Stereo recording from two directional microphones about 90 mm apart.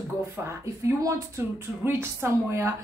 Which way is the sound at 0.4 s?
30° right (ahead or behind).